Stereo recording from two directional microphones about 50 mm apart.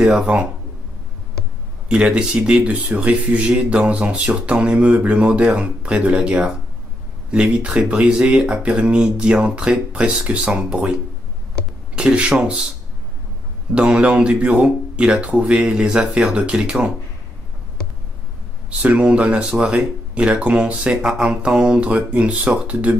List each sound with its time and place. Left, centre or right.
0.0 s mantra: centre
1.9 s mantra: right
13.7 s mantra: centre
15.6 s speech: centre
18.7 s mantra: right
21.0 s speech: centre
21.3 s mantra: right